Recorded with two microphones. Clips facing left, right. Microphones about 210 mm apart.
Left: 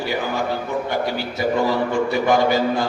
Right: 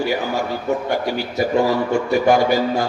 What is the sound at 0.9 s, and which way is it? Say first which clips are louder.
A man's voice: right 2 dB; 45° right (ahead or behind).